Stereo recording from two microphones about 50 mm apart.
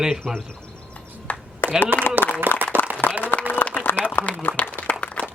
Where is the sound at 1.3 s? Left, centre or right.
Left.